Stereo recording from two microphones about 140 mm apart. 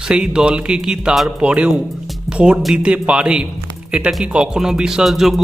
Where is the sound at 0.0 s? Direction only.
5° right (ahead or behind).